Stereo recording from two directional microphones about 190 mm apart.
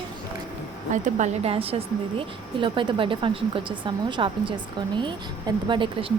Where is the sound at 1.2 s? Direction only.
30° right (ahead or behind).